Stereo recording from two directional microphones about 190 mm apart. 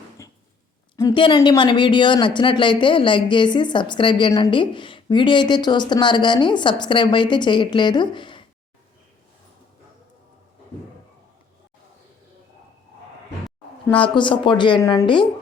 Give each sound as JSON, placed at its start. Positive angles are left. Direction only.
{"t": 0.2, "sound": "a sound", "side_deg": 15}
{"t": 0.9, "sound": "speech", "side_deg": 20}
{"t": 14.0, "sound": "speech", "side_deg": 25}